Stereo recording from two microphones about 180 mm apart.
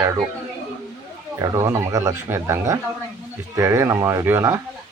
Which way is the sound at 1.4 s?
20° right (ahead or behind).